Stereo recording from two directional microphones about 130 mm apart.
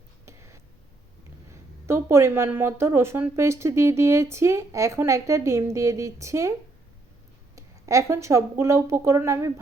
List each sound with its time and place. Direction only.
0.3 s a sound: 20° right (ahead or behind)
1.9 s a woman's voice: 20° right (ahead or behind)
7.5 s speech: 25° right (ahead or behind)